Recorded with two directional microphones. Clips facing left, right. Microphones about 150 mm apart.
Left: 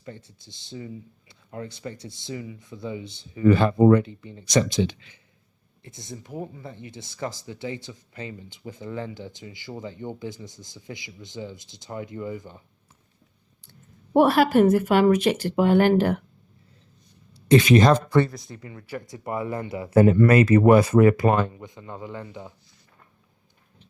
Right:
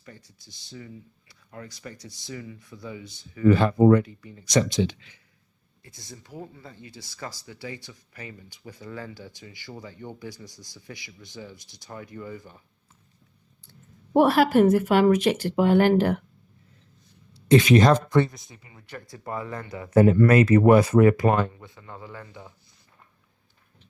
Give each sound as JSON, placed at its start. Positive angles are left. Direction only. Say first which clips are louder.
{"t": 0.0, "sound": "speech", "louder": "left 7 dB", "side_deg": 25}
{"t": 14.1, "sound": "speech", "louder": "left 1 dB", "side_deg": 20}
{"t": 17.7, "sound": "speech", "louder": "left 1 dB", "side_deg": 25}
{"t": 18.1, "sound": "speech", "louder": "left 1 dB", "side_deg": 0}
{"t": 18.9, "sound": "speech", "louder": "left 3 dB", "side_deg": 20}